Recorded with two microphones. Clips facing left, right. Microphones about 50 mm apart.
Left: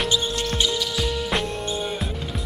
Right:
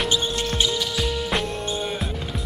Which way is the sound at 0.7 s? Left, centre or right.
Centre.